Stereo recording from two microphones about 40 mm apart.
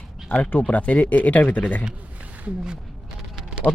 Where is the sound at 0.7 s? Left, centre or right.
Left.